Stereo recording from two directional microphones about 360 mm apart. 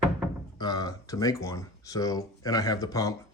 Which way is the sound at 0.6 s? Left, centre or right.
Centre.